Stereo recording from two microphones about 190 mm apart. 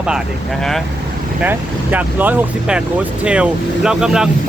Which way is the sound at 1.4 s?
10° right (ahead or behind).